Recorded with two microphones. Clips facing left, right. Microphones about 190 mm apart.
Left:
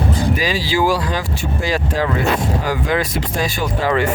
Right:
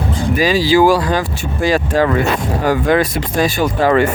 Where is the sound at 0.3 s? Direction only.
45° right (ahead or behind).